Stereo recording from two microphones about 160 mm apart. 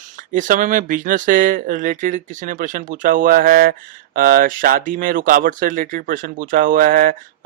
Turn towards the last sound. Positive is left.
turn(degrees=-60)  # may be behind; listen again after turning